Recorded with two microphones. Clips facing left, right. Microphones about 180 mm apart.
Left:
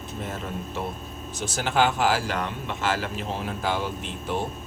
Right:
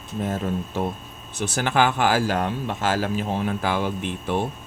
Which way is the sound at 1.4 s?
60° right (ahead or behind).